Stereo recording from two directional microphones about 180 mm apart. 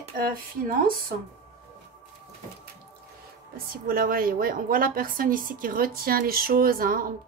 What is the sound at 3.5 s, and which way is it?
A woman's voice, 55° right (ahead or behind).